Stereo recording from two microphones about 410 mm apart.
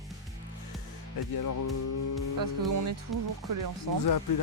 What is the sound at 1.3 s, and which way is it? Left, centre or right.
Speech, left.